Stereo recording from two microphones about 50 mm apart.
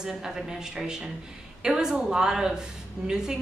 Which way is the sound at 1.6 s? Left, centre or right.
Centre.